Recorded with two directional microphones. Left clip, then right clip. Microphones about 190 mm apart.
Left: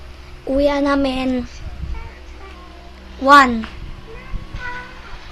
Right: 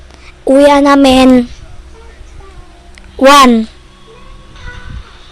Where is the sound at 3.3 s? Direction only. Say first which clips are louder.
Right 4 dB; 55° right (ahead or behind).